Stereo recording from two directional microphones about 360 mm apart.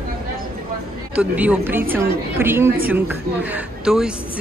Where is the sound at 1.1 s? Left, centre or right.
Centre.